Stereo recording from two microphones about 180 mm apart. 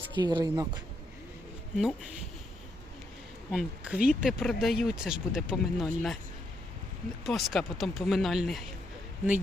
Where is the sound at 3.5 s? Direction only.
5° right (ahead or behind).